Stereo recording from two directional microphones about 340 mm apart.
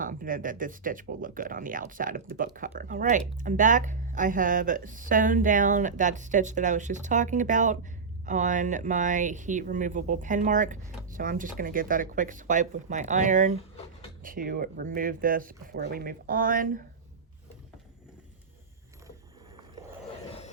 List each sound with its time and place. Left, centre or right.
0.0 s speech: right